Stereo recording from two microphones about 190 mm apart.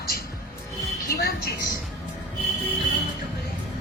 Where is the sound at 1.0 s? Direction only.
50° left (ahead or behind).